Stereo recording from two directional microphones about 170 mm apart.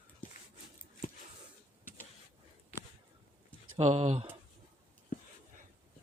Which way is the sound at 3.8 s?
40° right (ahead or behind).